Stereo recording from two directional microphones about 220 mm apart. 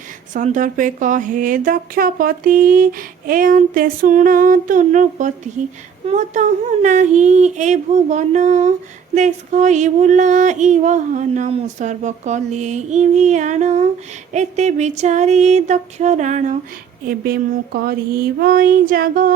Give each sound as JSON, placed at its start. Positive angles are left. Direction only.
{"t": 0.3, "sound": "speech", "side_deg": -35}